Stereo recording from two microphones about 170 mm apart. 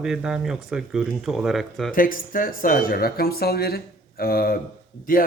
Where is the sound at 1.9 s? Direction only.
55° left (ahead or behind).